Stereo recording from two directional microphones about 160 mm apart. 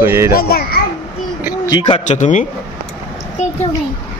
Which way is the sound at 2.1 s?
50° left (ahead or behind).